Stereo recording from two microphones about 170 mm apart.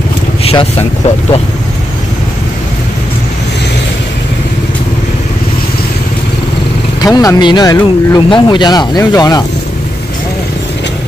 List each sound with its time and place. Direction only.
0.4 s vehicle: 35° left (ahead or behind)
7.0 s speech: 20° left (ahead or behind)